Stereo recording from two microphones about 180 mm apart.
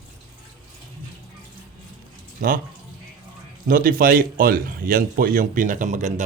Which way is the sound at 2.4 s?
50° right (ahead or behind).